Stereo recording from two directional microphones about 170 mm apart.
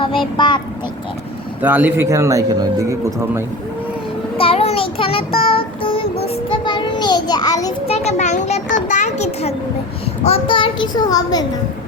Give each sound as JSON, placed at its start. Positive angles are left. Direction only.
{"t": 0.0, "sound": "speech", "side_deg": 30}
{"t": 1.6, "sound": "speech", "side_deg": -10}
{"t": 4.4, "sound": "child singing", "side_deg": 35}
{"t": 7.9, "sound": "a child's voice", "side_deg": 40}